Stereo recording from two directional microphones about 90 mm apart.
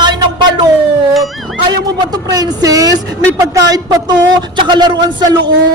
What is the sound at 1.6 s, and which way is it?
Speech, 45° right (ahead or behind).